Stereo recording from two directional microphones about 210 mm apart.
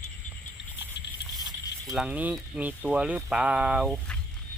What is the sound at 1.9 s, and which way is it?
Speech, 5° right (ahead or behind).